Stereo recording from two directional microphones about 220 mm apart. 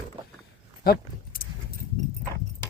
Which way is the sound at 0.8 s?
45° left (ahead or behind).